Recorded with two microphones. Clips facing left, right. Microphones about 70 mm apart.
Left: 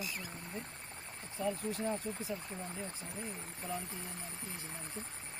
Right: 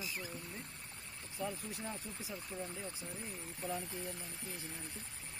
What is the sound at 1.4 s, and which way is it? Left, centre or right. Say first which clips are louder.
Speech: left 5 dB; left.